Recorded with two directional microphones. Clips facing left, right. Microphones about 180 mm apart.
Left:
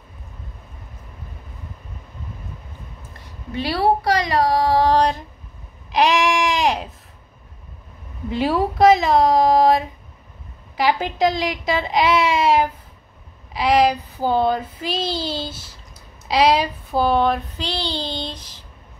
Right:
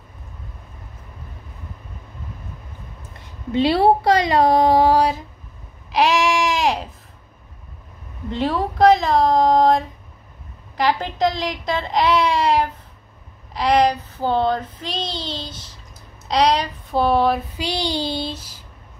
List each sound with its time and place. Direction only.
3.5 s speech: 25° right (ahead or behind); by 5.2 s 5° right (ahead or behind)
5.9 s sheep: centre (ahead or behind)
8.3 s speech: 5° left (ahead or behind)